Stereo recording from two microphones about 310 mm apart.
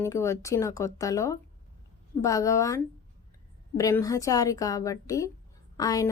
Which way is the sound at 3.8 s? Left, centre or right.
Centre.